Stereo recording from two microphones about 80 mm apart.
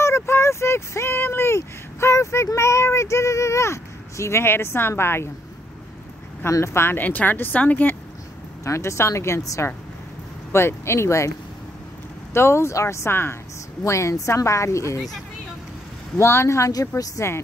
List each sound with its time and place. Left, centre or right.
0.0 s a sound: left
6.4 s speech: left
8.6 s a woman's voice: left
12.4 s a woman's voice: left
16.2 s a woman's voice: left